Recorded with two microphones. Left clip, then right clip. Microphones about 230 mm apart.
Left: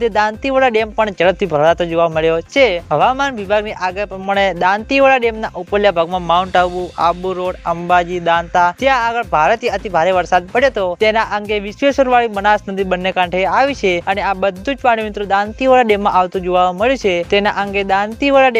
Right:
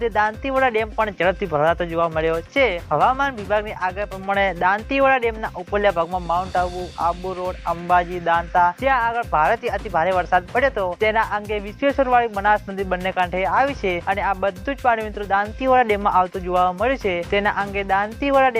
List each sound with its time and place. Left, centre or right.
0.0 s speech: left